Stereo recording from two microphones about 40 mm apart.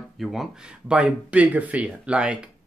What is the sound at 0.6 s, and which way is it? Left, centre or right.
Speech, right.